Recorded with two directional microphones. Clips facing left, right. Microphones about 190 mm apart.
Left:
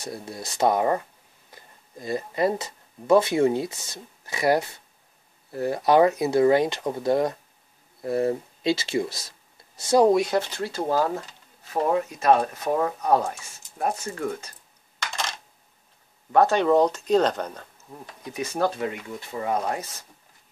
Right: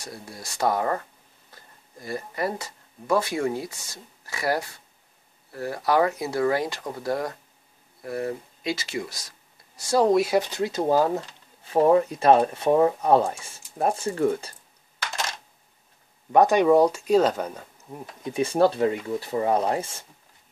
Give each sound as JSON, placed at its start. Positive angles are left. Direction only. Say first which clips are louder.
{"t": 0.0, "sound": "speech", "louder": "left 5 dB", "side_deg": 20}
{"t": 10.0, "sound": "speech", "louder": "even", "side_deg": -5}
{"t": 11.7, "sound": "speech", "louder": "right 5 dB", "side_deg": -30}
{"t": 16.3, "sound": "speech", "louder": "right 2 dB", "side_deg": -15}
{"t": 18.2, "sound": "speech", "louder": "right 5 dB", "side_deg": -30}